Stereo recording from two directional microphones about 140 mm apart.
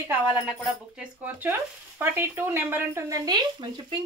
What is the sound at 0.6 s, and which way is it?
A woman's voice, 10° right (ahead or behind).